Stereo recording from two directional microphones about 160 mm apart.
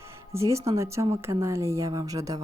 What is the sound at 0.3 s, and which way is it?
Speech, 20° right (ahead or behind).